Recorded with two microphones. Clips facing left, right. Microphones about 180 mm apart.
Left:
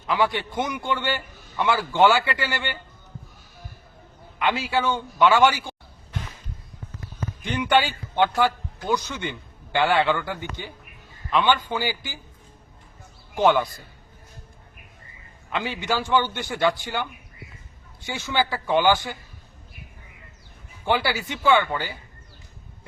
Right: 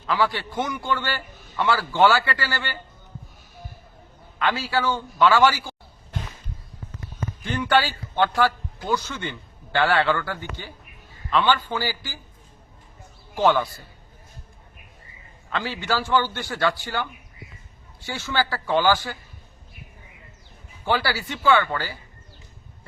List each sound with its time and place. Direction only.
0.1 s a man's voice: 20° left (ahead or behind)
4.4 s a man's voice: 20° left (ahead or behind)
7.4 s a man's voice: 15° left (ahead or behind)
13.3 s a man's voice: 15° left (ahead or behind)
15.5 s a man's voice: 15° left (ahead or behind)
20.8 s a man's voice: 20° left (ahead or behind)